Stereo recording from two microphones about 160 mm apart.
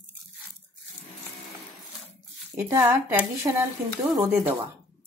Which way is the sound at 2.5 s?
15° right (ahead or behind).